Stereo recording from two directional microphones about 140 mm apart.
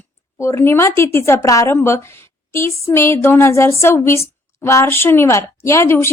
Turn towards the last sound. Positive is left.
turn(degrees=20)  # may be behind; listen again after turning